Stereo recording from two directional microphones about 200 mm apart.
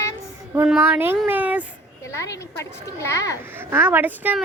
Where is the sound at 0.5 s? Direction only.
10° right (ahead or behind).